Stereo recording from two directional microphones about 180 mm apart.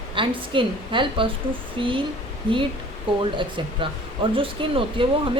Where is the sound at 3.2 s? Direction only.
25° right (ahead or behind).